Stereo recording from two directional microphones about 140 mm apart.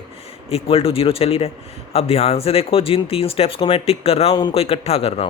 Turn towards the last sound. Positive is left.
turn(degrees=45)  # may be behind; listen again after turning